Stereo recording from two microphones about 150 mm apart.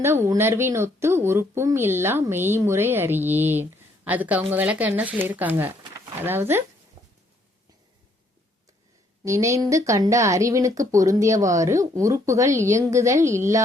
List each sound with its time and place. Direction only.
0.0 s speech: 15° right (ahead or behind)
7.0 s a sound: 20° right (ahead or behind)
9.2 s speech: 20° right (ahead or behind)